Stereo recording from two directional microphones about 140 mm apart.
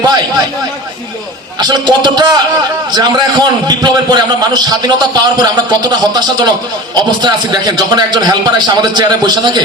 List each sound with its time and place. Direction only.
1.5 s a man's voice: 30° right (ahead or behind)